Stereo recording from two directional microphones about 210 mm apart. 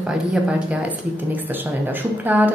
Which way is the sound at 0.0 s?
5° right (ahead or behind).